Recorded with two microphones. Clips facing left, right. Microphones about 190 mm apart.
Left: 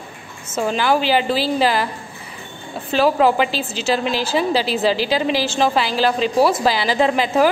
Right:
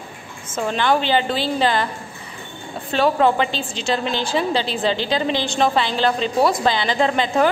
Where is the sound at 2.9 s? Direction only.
5° left (ahead or behind).